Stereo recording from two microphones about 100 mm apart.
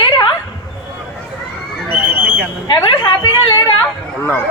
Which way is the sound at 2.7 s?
45° left (ahead or behind).